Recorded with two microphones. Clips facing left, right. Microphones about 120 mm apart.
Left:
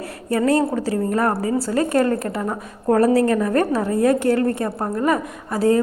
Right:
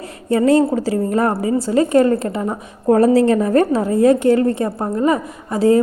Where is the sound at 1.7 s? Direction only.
15° right (ahead or behind).